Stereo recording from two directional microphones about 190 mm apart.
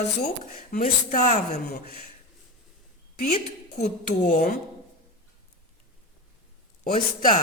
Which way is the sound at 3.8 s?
55° left (ahead or behind).